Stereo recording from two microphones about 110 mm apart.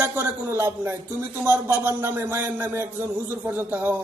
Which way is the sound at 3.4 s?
15° right (ahead or behind).